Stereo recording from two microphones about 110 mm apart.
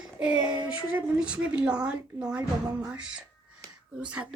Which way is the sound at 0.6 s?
10° right (ahead or behind).